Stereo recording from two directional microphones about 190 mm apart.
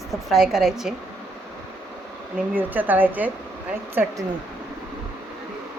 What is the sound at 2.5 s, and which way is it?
A woman's voice, 10° right (ahead or behind).